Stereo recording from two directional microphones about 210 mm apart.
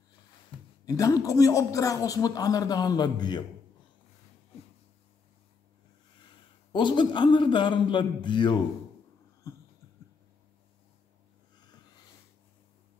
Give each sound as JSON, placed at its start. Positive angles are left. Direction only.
{"t": 0.8, "sound": "speech", "side_deg": 15}
{"t": 6.7, "sound": "a man's voice", "side_deg": 20}